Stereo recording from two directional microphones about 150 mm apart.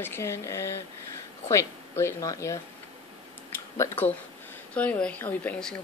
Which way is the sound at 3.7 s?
15° left (ahead or behind).